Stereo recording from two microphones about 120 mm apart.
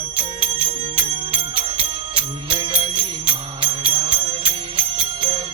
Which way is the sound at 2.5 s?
45° right (ahead or behind).